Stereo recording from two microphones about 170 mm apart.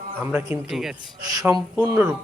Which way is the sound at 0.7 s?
Centre (ahead or behind).